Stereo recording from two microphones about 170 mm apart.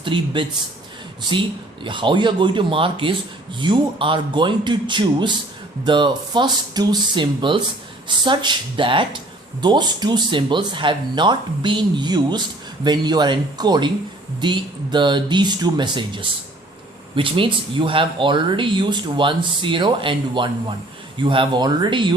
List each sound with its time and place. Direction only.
0.0 s speech: 30° right (ahead or behind)
1.8 s speech: 30° right (ahead or behind)